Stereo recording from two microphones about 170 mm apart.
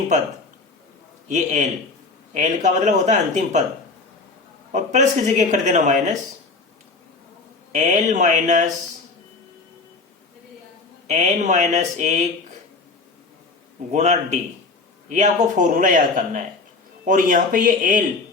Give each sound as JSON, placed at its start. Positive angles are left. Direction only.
{"t": 1.3, "sound": "speech", "side_deg": -45}
{"t": 4.7, "sound": "speech", "side_deg": -45}
{"t": 7.7, "sound": "speech", "side_deg": -50}
{"t": 11.0, "sound": "speech", "side_deg": -45}
{"t": 13.9, "sound": "speech", "side_deg": -45}